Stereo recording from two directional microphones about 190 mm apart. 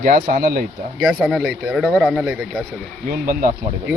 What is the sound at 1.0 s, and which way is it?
Speech, centre (ahead or behind).